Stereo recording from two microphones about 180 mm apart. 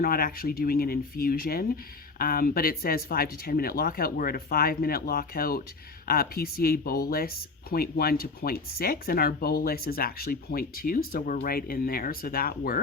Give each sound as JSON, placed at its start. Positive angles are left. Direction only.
{"t": 0.0, "sound": "speech", "side_deg": 55}